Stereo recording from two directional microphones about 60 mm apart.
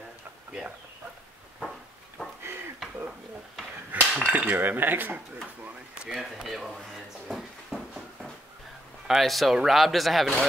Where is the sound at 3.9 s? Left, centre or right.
Right.